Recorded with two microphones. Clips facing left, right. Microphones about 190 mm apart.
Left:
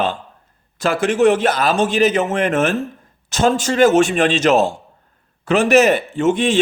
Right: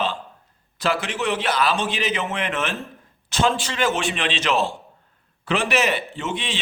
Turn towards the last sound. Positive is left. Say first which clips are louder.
# left 13 dB
turn(degrees=50)  # may be behind; listen again after turning